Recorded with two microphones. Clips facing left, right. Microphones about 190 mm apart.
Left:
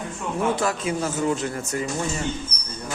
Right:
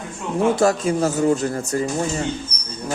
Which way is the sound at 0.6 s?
40° right (ahead or behind).